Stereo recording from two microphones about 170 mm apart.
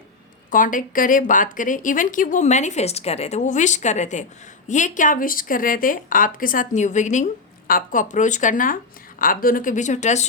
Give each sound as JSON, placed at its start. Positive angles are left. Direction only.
{"t": 0.5, "sound": "speech", "side_deg": 50}